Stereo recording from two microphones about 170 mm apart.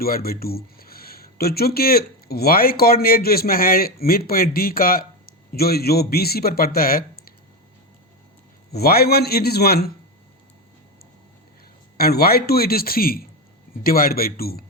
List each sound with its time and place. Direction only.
0.0 s speech: 60° left (ahead or behind)
8.7 s a man's voice: 65° left (ahead or behind)
11.9 s a man's voice: 65° left (ahead or behind)